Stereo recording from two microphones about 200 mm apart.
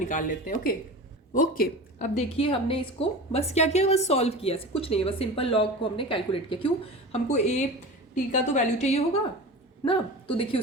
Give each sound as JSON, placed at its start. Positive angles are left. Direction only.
{"t": 0.0, "sound": "a woman's voice", "side_deg": 40}